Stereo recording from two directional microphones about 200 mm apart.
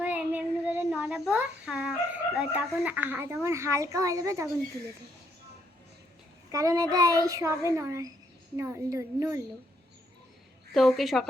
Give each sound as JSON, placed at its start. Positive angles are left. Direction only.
{"t": 0.0, "sound": "speech", "side_deg": -5}
{"t": 6.5, "sound": "a child's voice", "side_deg": -15}
{"t": 10.8, "sound": "a woman's voice", "side_deg": 0}